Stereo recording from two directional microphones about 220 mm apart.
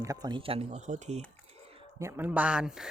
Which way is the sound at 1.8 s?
15° right (ahead or behind).